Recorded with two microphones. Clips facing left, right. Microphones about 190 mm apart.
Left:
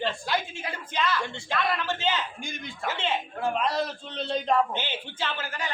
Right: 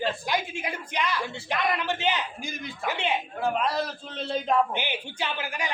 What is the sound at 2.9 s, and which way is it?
Speech, 15° right (ahead or behind).